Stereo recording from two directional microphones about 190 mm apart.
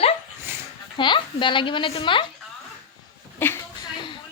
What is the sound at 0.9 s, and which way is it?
A woman's voice, 25° left (ahead or behind).